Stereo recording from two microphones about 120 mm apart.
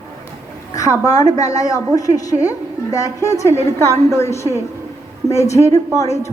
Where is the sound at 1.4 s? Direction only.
30° left (ahead or behind).